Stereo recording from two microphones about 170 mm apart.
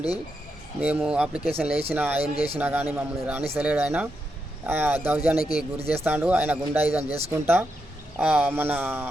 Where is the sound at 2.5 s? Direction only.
10° right (ahead or behind).